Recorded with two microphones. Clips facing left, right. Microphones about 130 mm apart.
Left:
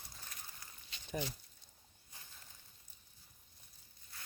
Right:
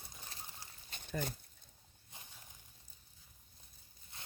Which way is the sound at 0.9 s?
50° right (ahead or behind).